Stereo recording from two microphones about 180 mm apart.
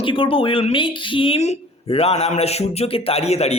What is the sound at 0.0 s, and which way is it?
A man's voice, 30° left (ahead or behind).